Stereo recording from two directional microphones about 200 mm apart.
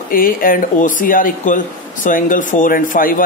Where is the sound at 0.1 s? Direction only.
45° left (ahead or behind).